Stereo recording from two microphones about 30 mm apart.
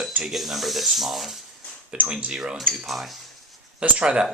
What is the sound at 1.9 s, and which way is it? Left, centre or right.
Speech, right.